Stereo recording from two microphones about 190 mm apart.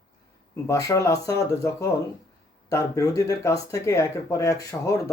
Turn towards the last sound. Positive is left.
turn(degrees=15)  # may be behind; listen again after turning